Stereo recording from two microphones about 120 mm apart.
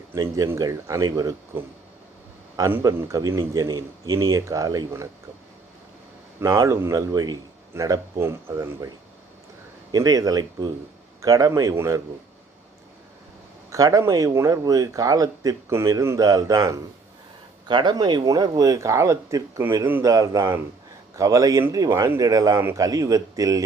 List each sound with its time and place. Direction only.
0.1 s speech: 25° right (ahead or behind)
2.6 s speech: 25° right (ahead or behind)
6.4 s speech: 30° right (ahead or behind)
9.9 s speech: 30° right (ahead or behind)
13.7 s speech: 30° right (ahead or behind)
17.7 s speech: 40° right (ahead or behind)